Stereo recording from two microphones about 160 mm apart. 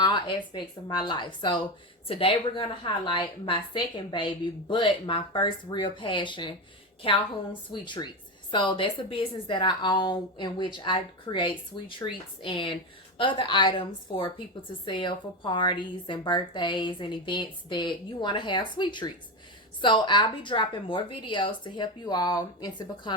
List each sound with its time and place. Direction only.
0.0 s a woman's voice: 30° left (ahead or behind)
7.7 s a woman's voice: 30° left (ahead or behind)